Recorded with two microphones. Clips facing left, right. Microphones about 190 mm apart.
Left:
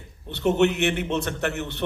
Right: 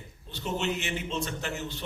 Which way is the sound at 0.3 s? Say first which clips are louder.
Left 11 dB; 65° left (ahead or behind).